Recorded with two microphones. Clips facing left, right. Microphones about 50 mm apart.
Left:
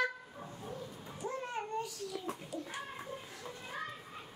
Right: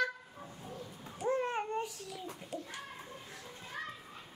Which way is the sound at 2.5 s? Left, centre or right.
Right.